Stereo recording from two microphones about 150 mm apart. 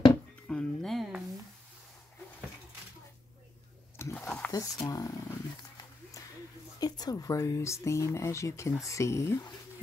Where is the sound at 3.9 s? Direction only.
15° left (ahead or behind).